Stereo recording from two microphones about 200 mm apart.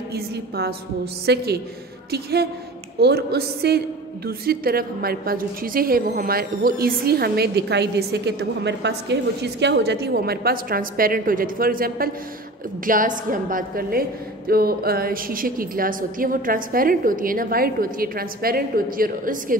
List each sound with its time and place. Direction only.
0.1 s a woman's voice: 50° right (ahead or behind)